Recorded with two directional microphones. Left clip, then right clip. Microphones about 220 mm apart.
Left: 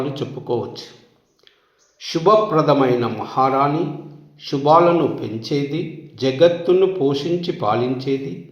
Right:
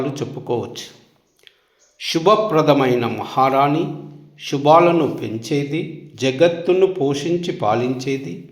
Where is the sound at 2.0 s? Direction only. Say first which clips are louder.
Even; 30° right (ahead or behind).